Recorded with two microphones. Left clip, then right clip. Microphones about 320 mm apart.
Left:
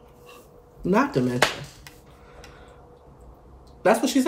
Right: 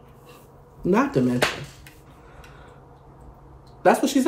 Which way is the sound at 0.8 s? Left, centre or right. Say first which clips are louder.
Right 1 dB; centre.